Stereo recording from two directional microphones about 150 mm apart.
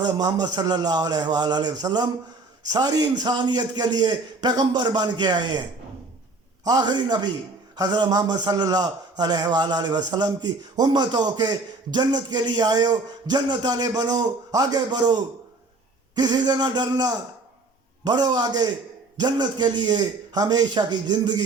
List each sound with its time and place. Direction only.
0.0 s a man's voice: 25° right (ahead or behind)
6.7 s a man's voice: 25° right (ahead or behind)